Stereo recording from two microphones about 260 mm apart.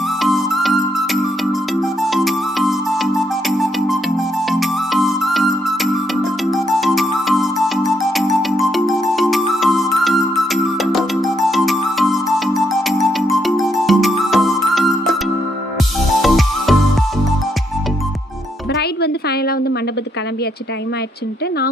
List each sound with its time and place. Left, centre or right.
0.2 s music: centre
16.2 s music: centre
18.7 s a sound: left